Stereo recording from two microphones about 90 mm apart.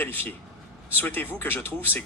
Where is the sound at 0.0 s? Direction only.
25° left (ahead or behind).